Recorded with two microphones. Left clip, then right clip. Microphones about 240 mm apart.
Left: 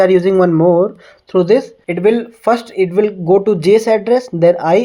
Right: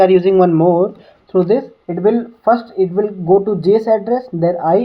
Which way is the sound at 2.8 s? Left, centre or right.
Left.